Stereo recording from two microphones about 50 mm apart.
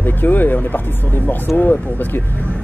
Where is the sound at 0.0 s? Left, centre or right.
Left.